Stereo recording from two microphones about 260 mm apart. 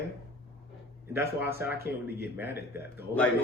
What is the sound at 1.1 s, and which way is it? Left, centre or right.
Speech, centre.